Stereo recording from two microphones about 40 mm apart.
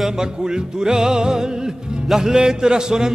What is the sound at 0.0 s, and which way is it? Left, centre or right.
Music, centre.